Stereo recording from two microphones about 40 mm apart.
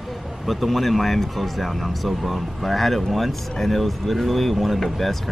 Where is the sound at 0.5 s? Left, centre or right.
Centre.